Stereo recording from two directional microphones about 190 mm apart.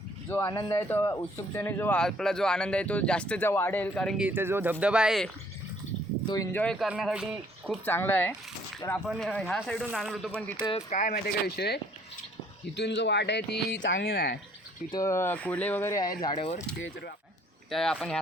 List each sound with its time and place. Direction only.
0.3 s speech: 15° left (ahead or behind)
4.3 s speech: 10° right (ahead or behind)
6.2 s speech: 20° left (ahead or behind)
6.5 s music: 5° left (ahead or behind)
7.9 s speech: 10° left (ahead or behind)
9.0 s music: 5° left (ahead or behind)
10.6 s speech: 25° left (ahead or behind)
10.8 s speech: 40° left (ahead or behind)
14.8 s speech: 20° left (ahead or behind)
17.7 s music: centre (ahead or behind)